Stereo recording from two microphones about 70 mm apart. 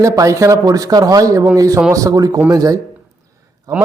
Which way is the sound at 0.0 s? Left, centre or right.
Right.